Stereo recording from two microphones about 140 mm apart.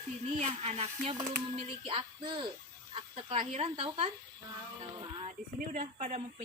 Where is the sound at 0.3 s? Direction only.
55° right (ahead or behind).